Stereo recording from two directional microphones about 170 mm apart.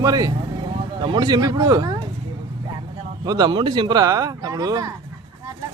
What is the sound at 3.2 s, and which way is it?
Speech, 25° right (ahead or behind).